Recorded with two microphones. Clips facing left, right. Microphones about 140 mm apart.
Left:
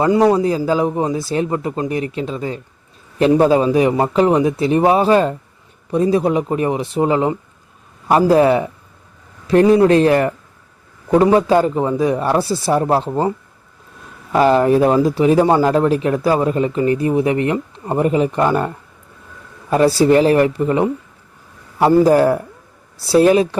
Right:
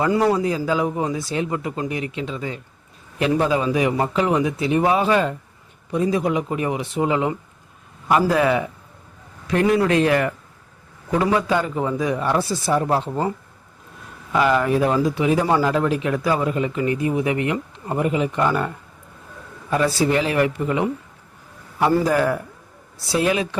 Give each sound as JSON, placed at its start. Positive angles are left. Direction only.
{"t": 0.0, "sound": "a man's voice", "side_deg": 20}
{"t": 0.4, "sound": "speech", "side_deg": 35}
{"t": 14.3, "sound": "speech", "side_deg": 35}
{"t": 19.7, "sound": "speech", "side_deg": 35}